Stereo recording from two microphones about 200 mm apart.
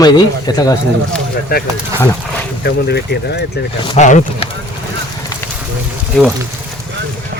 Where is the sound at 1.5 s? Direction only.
50° left (ahead or behind).